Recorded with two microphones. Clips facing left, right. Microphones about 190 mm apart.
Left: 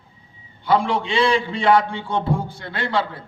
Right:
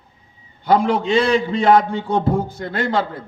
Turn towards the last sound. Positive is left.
turn(degrees=-45)  # may be behind; listen again after turning